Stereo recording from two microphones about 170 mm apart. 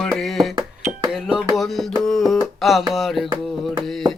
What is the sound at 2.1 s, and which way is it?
Music, centre (ahead or behind).